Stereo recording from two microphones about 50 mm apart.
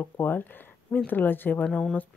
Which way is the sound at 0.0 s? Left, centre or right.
Left.